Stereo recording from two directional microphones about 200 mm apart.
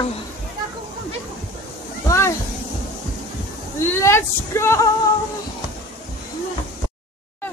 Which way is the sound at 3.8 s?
10° left (ahead or behind).